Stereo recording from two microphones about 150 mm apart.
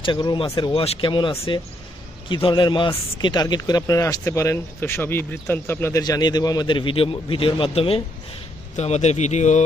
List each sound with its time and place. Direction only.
0.0 s speech: 30° left (ahead or behind); by 9.7 s 50° left (ahead or behind)